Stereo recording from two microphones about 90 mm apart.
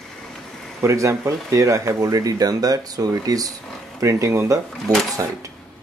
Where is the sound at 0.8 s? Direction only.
30° right (ahead or behind).